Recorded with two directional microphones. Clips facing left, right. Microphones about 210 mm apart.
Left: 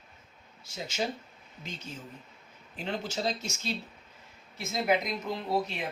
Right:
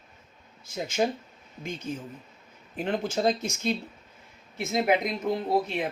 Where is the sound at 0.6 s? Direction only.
50° right (ahead or behind).